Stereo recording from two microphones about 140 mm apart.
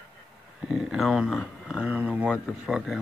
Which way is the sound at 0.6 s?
5° right (ahead or behind).